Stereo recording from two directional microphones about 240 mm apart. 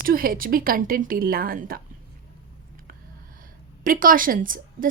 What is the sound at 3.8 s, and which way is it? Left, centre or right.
A woman's voice, right.